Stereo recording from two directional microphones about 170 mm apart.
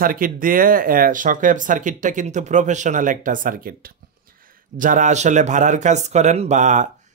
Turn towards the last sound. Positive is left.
turn(degrees=-45)  # may be behind; listen again after turning